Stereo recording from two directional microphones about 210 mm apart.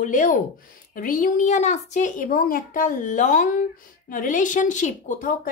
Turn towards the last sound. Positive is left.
turn(degrees=40)  # may be behind; listen again after turning